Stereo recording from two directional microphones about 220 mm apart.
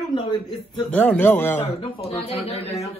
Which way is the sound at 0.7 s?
5° left (ahead or behind).